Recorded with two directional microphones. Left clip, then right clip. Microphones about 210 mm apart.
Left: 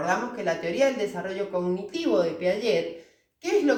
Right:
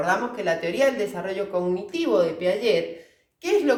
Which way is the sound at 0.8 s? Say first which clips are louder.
Even; 40° right (ahead or behind).